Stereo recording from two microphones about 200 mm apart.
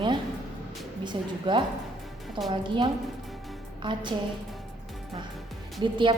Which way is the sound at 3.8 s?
25° right (ahead or behind).